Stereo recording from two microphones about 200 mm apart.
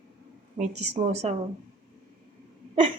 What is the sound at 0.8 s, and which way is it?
Speech, 35° right (ahead or behind).